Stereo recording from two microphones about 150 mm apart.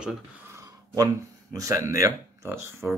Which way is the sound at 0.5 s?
25° right (ahead or behind).